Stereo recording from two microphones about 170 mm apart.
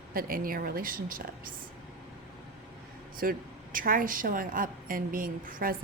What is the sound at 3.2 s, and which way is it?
Speech, 55° right (ahead or behind).